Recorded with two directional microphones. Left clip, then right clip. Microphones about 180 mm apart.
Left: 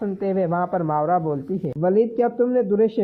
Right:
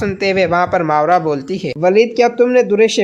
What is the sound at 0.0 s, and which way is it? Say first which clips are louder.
Speech: right 8 dB; 40° right (ahead or behind).